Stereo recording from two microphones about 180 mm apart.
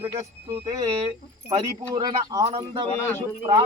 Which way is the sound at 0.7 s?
35° right (ahead or behind).